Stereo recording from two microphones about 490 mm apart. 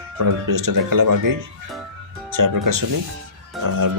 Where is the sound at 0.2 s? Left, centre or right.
Right.